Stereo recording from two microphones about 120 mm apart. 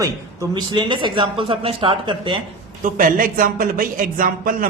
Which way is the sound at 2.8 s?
90° right.